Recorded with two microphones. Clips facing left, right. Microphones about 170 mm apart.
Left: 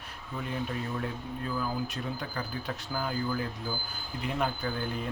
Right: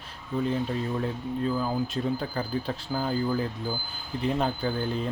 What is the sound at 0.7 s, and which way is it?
Speech, 30° right (ahead or behind).